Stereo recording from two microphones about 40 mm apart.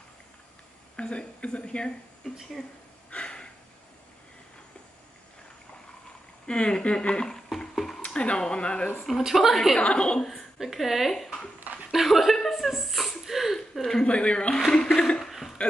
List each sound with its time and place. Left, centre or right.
0.9 s speech: left
3.1 s a sound: left
6.4 s speech: left
7.3 s a sound: centre
8.0 s speech: left
9.2 s a woman's voice: centre
9.8 s speech: left
10.6 s a woman's voice: centre
12.4 s a sound: centre
13.7 s speech: centre
14.0 s speech: left
15.0 s speech: centre
15.2 s a sound: centre